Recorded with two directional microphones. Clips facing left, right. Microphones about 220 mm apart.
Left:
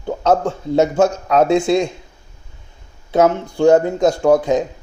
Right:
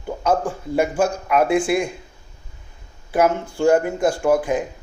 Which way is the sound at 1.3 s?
25° left (ahead or behind).